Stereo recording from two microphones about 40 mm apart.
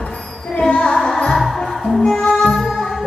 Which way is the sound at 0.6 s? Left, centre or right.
Left.